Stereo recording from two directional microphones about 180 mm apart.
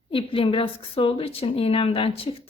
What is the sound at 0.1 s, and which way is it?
A woman's voice, 30° left (ahead or behind).